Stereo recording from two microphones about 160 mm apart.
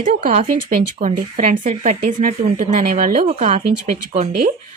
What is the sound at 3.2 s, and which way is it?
Speech, 40° right (ahead or behind).